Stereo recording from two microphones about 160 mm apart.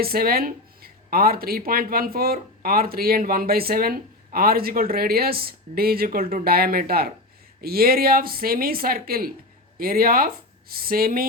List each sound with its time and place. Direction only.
0.0 s speech: 70° right (ahead or behind)